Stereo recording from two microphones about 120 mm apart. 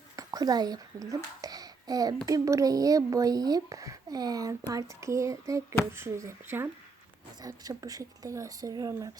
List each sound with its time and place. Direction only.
0.2 s a child's voice: 30° right (ahead or behind)
7.4 s speech: 30° right (ahead or behind)